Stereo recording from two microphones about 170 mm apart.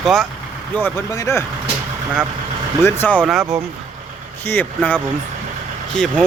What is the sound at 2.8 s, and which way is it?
Speech, 10° left (ahead or behind).